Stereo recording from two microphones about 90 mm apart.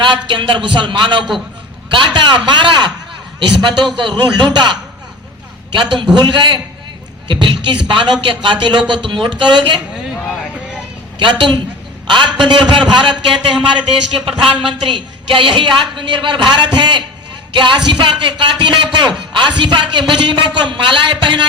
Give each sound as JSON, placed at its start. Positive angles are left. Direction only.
{"t": 0.0, "sound": "a man's voice", "side_deg": -65}
{"t": 11.2, "sound": "a man's voice", "side_deg": -60}
{"t": 14.3, "sound": "speech", "side_deg": -80}
{"t": 14.7, "sound": "a man's voice", "side_deg": -60}